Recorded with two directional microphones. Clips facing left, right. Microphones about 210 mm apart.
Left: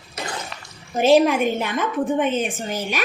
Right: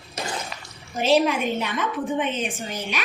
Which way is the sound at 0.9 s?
50° left (ahead or behind).